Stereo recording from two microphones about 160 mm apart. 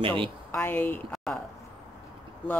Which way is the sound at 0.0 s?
35° right (ahead or behind).